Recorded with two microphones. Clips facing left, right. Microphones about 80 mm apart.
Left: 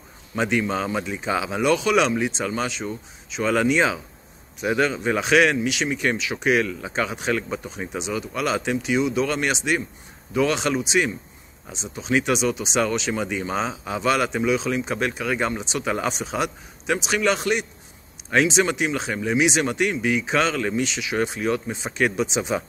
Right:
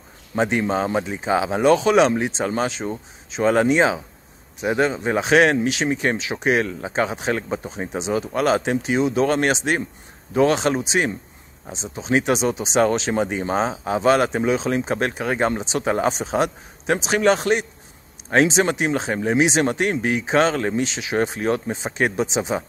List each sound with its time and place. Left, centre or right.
0.4 s speech: right